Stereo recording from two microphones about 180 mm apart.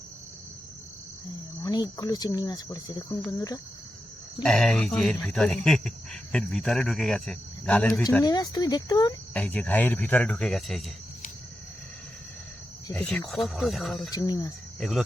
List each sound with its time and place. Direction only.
1.6 s speech: 20° left (ahead or behind)
4.4 s speech: 5° left (ahead or behind)
8.2 s speech: 20° left (ahead or behind)
9.3 s speech: 10° left (ahead or behind)
12.9 s speech: 5° left (ahead or behind)
14.1 s speech: 20° left (ahead or behind)
14.8 s speech: centre (ahead or behind)